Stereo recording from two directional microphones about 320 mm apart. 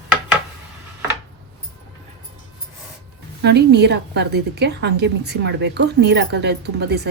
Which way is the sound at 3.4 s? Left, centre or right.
Right.